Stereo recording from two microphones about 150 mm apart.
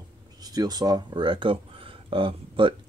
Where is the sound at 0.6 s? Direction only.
25° right (ahead or behind).